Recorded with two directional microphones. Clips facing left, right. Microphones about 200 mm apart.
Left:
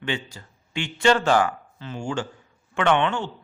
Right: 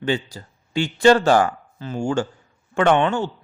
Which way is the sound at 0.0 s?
35° right (ahead or behind).